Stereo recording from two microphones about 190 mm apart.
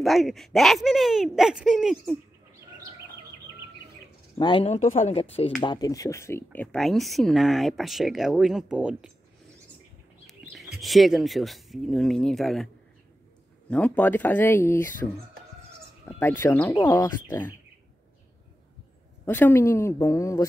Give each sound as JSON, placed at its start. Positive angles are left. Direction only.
{"t": 0.0, "sound": "speech", "side_deg": 0}
{"t": 4.4, "sound": "speech", "side_deg": 25}
{"t": 5.6, "sound": "speech", "side_deg": 20}
{"t": 10.8, "sound": "speech", "side_deg": 0}
{"t": 13.7, "sound": "speech", "side_deg": 5}
{"t": 19.2, "sound": "speech", "side_deg": 10}